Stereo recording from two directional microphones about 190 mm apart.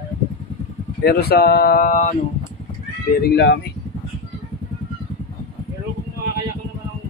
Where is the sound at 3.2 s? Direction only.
60° left (ahead or behind).